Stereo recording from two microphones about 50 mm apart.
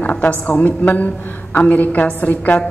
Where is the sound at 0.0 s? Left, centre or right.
Left.